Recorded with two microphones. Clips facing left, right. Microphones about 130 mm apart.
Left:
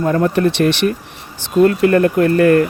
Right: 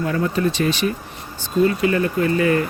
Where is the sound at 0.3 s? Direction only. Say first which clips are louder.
Left 5 dB; 65° left (ahead or behind).